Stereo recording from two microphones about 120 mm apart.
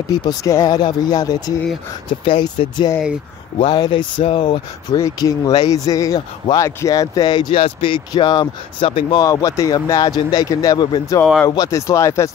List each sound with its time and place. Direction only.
0.1 s speech: 35° left (ahead or behind)
2.2 s speech: 45° left (ahead or behind)
4.9 s speech: 30° left (ahead or behind)
9.3 s speech: 25° left (ahead or behind)